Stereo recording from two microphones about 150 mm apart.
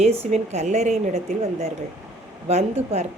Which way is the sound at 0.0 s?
45° right (ahead or behind).